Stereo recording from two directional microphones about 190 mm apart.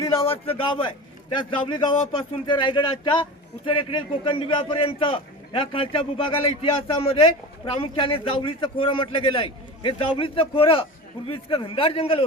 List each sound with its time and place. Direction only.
0.5 s a man's voice: 25° left (ahead or behind)